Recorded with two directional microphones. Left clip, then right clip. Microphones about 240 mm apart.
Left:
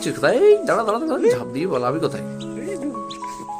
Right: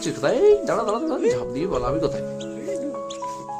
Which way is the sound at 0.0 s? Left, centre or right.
Centre.